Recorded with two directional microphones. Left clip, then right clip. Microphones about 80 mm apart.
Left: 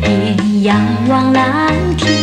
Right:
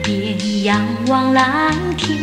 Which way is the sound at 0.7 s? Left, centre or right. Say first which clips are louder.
Left 2 dB; right.